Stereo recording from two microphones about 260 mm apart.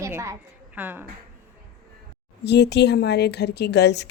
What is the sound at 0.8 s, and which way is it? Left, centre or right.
Speech, centre.